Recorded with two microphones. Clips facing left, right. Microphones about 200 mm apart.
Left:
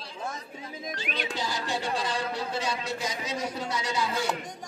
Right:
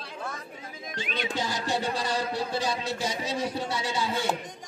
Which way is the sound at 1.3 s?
45° right (ahead or behind).